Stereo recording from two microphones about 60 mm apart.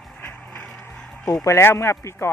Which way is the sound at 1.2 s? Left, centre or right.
Left.